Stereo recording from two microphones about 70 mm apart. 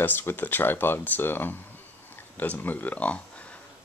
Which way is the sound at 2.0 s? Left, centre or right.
Left.